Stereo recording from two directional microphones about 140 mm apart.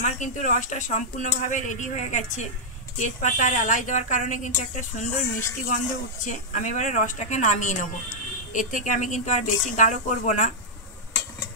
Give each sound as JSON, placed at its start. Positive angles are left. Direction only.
{"t": 0.0, "sound": "speech", "side_deg": 60}